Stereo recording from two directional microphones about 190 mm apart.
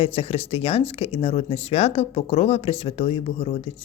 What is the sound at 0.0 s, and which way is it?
Speech, 30° left (ahead or behind).